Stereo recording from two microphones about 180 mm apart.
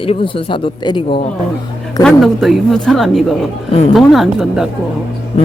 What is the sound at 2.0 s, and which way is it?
A woman's voice, centre (ahead or behind).